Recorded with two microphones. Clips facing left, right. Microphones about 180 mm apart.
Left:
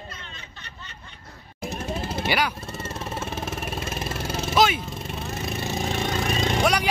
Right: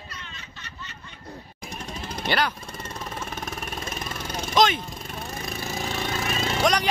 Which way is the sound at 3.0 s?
25° left (ahead or behind).